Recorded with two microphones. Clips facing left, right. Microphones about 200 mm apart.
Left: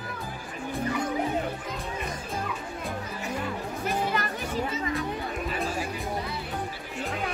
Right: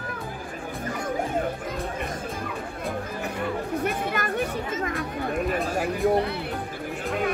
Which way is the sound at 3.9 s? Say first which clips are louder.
Right 1 dB; 55° right (ahead or behind).